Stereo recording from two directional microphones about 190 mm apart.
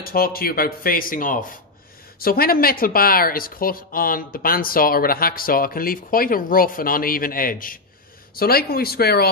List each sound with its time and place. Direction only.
0.0 s speech: 50° left (ahead or behind)